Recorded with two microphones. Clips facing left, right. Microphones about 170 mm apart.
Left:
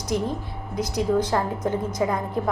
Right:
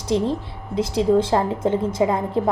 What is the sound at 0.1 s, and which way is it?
A woman's voice, 25° right (ahead or behind).